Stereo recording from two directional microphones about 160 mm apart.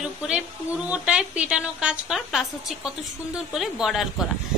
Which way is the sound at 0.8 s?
5° right (ahead or behind).